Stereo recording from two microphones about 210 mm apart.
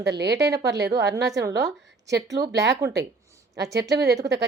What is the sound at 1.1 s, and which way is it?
A woman's voice, 15° right (ahead or behind).